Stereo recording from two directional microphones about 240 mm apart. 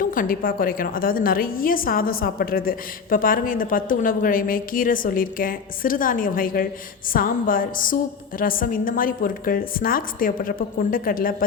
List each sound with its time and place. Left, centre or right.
0.0 s a woman's voice: left